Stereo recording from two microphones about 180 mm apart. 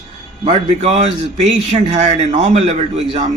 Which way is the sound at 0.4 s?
35° right (ahead or behind).